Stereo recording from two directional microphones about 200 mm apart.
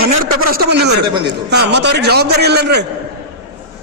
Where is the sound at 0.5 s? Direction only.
55° right (ahead or behind).